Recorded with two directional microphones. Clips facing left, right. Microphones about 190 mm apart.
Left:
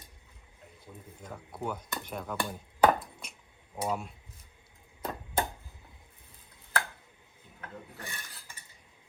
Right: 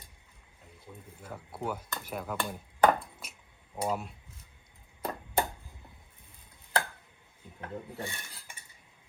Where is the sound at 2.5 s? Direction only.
Centre (ahead or behind).